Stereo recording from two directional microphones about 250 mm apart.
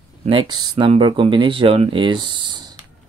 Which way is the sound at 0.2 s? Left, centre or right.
Right.